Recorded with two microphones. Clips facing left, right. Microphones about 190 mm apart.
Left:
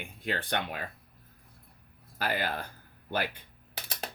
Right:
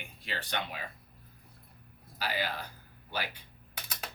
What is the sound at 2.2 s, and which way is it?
Speech, 50° left (ahead or behind).